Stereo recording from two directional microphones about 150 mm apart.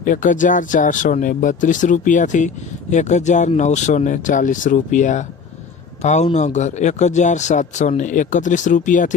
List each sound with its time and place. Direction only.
0.0 s a man's voice: 60° left (ahead or behind)